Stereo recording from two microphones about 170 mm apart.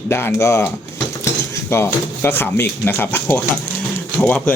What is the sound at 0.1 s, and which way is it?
Speech, 15° left (ahead or behind).